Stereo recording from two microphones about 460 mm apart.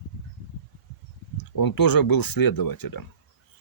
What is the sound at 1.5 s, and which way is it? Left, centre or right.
Speech, left.